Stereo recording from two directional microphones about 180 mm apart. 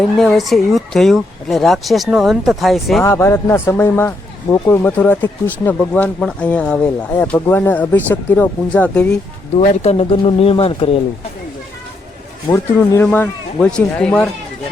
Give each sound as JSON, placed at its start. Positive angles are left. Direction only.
{"t": 0.2, "sound": "speech", "side_deg": 0}
{"t": 3.0, "sound": "speech", "side_deg": 15}
{"t": 9.6, "sound": "speech", "side_deg": 35}
{"t": 12.5, "sound": "speech", "side_deg": 15}